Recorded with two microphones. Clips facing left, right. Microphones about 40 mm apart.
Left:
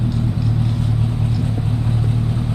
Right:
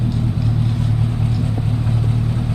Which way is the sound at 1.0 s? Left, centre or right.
Right.